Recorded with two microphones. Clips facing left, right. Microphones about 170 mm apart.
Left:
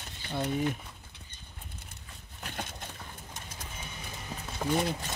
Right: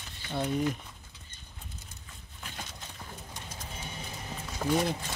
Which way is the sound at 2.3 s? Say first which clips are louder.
Left 4 dB; 55° left (ahead or behind).